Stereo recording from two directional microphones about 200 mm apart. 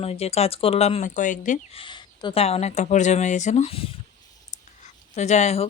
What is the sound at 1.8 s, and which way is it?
Speech, 25° left (ahead or behind).